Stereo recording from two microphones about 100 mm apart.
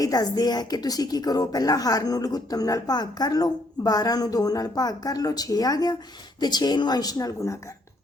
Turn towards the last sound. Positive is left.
turn(degrees=30)  # may be behind; listen again after turning